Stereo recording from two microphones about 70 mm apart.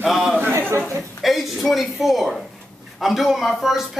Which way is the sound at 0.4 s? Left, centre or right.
Right.